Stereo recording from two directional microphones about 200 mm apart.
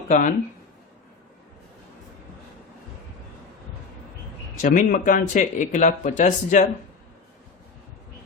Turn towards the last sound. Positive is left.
turn(degrees=40)  # may be behind; listen again after turning